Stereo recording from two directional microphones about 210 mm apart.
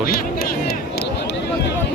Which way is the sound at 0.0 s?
45° left (ahead or behind).